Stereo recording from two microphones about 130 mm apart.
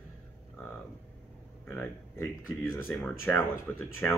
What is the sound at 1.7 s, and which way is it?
Speech, 15° left (ahead or behind).